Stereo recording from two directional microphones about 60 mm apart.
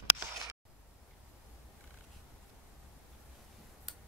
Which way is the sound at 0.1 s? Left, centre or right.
Right.